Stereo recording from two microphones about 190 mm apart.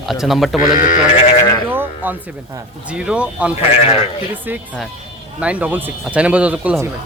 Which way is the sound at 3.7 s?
35° left (ahead or behind).